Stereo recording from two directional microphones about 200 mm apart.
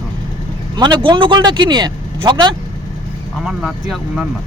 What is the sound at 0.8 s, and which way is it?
Speech, 25° right (ahead or behind).